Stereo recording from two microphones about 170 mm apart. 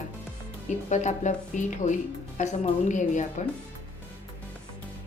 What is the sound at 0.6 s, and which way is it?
Speech, 45° left (ahead or behind).